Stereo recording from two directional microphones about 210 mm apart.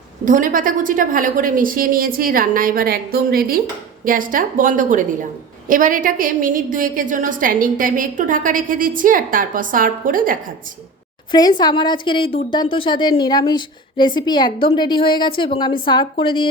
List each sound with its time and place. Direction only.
0.3 s a woman's voice: 40° right (ahead or behind)
11.3 s speech: 20° left (ahead or behind)